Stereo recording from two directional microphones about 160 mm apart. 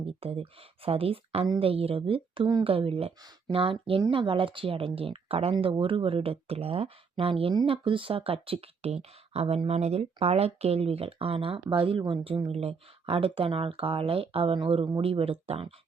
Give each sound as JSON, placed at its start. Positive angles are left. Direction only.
{"t": 0.0, "sound": "a woman's voice", "side_deg": -35}